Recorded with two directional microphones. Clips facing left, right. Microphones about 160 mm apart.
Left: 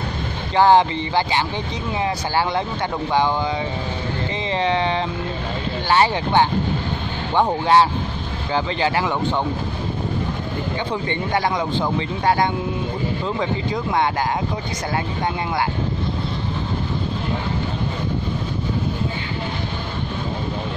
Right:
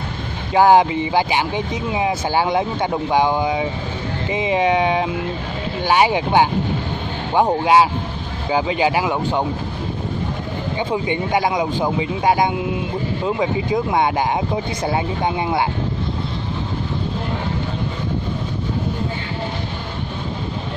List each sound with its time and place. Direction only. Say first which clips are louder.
0.6 s speech: right 2 dB; 10° right (ahead or behind)
10.8 s speech: right 6 dB; 15° right (ahead or behind)
13.7 s speech: right 3 dB; 20° right (ahead or behind)